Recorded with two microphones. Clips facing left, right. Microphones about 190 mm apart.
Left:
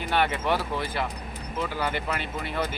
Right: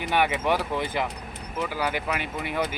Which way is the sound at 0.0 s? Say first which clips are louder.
Right 1 dB; 15° right (ahead or behind).